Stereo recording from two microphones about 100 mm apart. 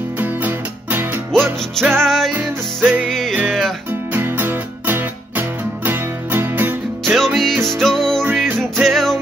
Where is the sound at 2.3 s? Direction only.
15° right (ahead or behind).